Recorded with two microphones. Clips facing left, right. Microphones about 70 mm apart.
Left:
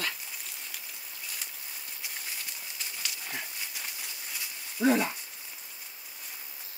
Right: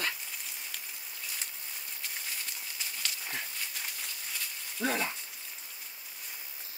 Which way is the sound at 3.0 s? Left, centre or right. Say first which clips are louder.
Even; centre.